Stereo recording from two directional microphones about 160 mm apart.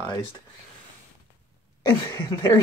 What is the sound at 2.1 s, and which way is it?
Speech, 15° left (ahead or behind).